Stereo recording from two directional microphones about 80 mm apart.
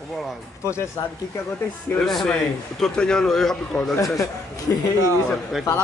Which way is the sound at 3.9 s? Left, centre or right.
Left.